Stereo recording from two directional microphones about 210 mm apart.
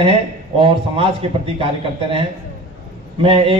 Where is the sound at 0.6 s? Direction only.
25° right (ahead or behind).